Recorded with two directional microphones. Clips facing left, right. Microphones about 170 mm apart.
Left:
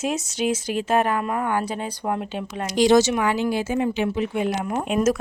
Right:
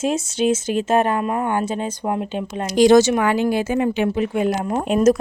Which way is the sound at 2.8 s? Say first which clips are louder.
Right 4 dB; 50° right (ahead or behind).